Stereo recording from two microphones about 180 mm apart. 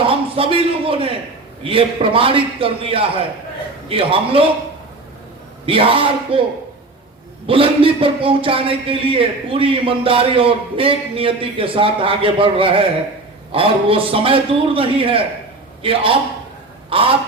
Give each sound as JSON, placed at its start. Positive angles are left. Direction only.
{"t": 0.0, "sound": "a sound", "side_deg": -30}
{"t": 1.6, "sound": "speech", "side_deg": -30}
{"t": 5.6, "sound": "speech", "side_deg": -30}
{"t": 7.4, "sound": "speech", "side_deg": -30}